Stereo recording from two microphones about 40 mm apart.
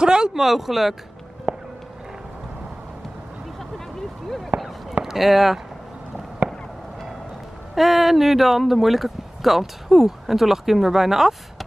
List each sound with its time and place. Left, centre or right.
0.0 s speech: centre
0.3 s speech: centre
1.5 s a sound: right
4.5 s fireworks: right
5.0 s speech: centre
7.7 s speech: centre